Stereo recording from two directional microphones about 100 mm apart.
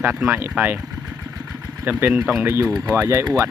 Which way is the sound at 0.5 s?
20° right (ahead or behind).